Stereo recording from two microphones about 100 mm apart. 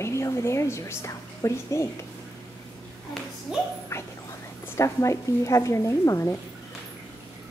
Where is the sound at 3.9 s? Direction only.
25° left (ahead or behind).